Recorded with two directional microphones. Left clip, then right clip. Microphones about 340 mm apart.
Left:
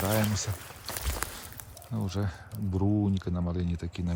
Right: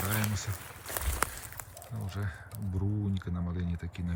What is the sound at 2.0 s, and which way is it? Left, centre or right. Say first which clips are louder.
Speech: left 4 dB; centre.